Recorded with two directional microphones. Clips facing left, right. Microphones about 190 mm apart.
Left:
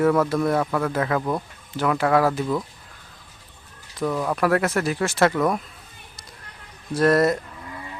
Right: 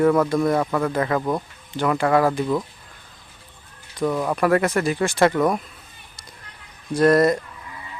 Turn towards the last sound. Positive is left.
turn(degrees=0)  # may be behind; listen again after turning